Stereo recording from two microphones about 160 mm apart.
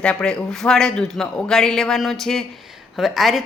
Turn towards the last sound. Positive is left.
turn(degrees=0)  # may be behind; listen again after turning